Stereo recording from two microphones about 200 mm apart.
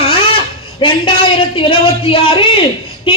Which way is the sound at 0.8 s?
25° left (ahead or behind).